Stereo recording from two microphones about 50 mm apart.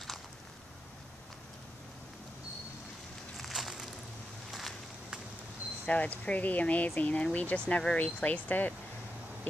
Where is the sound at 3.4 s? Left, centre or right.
Centre.